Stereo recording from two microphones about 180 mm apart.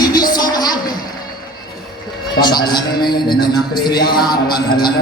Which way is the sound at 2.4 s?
25° left (ahead or behind).